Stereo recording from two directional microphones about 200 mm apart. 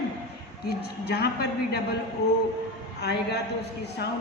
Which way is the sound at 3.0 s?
55° left (ahead or behind).